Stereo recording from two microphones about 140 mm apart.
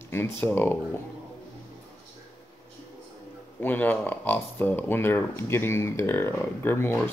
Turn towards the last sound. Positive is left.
turn(degrees=15)  # may be behind; listen again after turning